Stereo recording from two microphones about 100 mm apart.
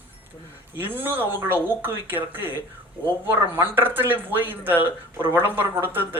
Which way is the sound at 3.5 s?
20° right (ahead or behind).